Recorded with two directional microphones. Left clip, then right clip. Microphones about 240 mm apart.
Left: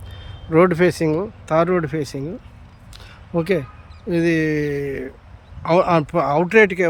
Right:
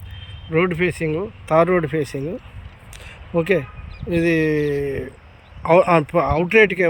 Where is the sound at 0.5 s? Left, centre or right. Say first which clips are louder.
Left 4 dB; centre.